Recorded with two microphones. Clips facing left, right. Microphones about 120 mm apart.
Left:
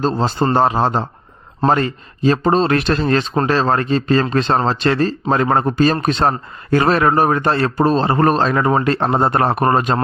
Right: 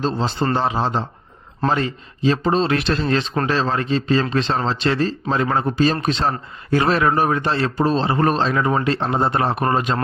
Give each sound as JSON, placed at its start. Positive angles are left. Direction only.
{"t": 0.0, "sound": "a man's voice", "side_deg": 45}